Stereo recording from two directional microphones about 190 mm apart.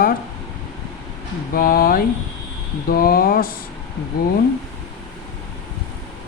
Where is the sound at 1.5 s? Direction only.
50° left (ahead or behind).